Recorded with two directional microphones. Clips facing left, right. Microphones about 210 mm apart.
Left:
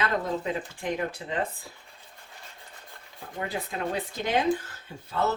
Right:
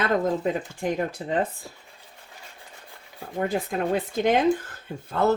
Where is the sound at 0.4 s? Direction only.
40° right (ahead or behind).